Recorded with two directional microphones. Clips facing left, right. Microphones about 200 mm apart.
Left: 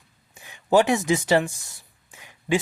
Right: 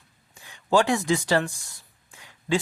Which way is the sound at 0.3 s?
20° left (ahead or behind).